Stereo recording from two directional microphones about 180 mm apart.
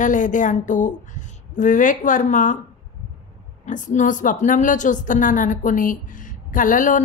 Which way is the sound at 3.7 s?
45° left (ahead or behind).